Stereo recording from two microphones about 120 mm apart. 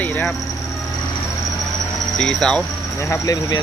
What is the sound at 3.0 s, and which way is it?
Speech, 30° left (ahead or behind).